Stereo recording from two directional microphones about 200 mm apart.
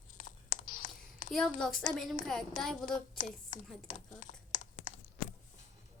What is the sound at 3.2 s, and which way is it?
A woman's voice, 40° left (ahead or behind).